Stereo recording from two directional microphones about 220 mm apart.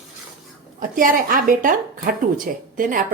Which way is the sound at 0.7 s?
40° right (ahead or behind).